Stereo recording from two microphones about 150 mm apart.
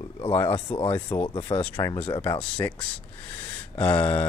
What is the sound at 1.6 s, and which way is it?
Speech, 20° left (ahead or behind).